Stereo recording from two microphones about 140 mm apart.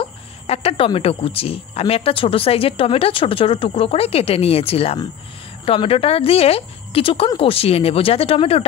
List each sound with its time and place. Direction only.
0.0 s speech: 45° left (ahead or behind)